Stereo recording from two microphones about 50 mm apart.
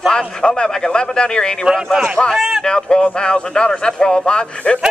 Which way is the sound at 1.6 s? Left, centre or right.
Centre.